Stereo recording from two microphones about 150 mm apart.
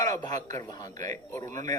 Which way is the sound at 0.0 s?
25° left (ahead or behind).